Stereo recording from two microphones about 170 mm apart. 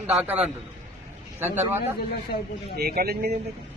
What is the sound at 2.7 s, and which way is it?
Speech, 65° right (ahead or behind).